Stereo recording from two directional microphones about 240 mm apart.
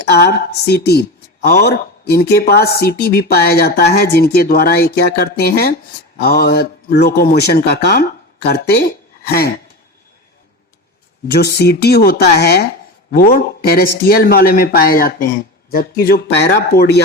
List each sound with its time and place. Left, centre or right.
0.0 s a woman's voice: left
9.2 s a sound: left
11.3 s a woman's voice: left